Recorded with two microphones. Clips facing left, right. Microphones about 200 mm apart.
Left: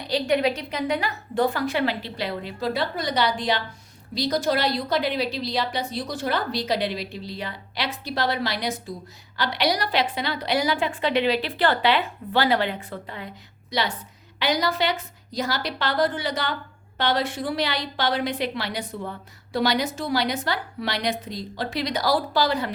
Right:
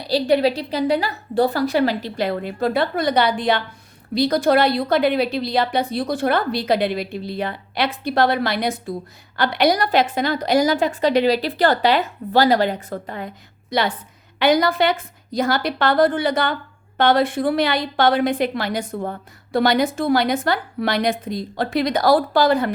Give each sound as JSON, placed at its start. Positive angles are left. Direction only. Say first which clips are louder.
{"t": 0.0, "sound": "a woman's voice", "louder": "right 5 dB", "side_deg": -35}